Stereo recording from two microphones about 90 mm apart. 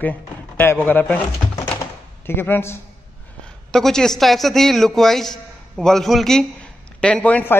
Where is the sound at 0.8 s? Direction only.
15° left (ahead or behind).